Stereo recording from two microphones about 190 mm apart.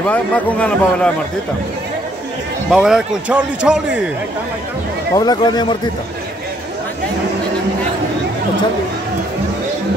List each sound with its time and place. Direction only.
0.1 s speech: 5° left (ahead or behind)
2.7 s speech: 5° right (ahead or behind)
5.1 s speech: 20° left (ahead or behind)